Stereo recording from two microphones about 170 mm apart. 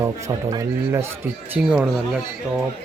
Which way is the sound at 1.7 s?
5° right (ahead or behind).